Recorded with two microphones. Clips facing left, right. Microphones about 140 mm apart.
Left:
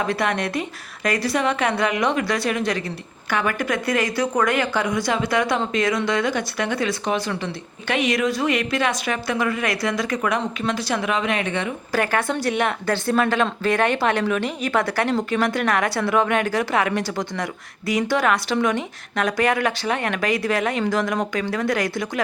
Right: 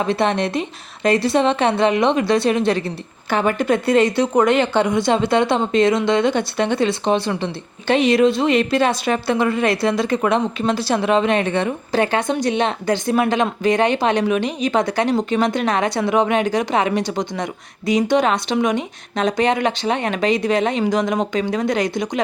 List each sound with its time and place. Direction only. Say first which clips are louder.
0.0 s speech: right 4 dB; 25° right (ahead or behind)
11.9 s speech: right 2 dB; 20° right (ahead or behind)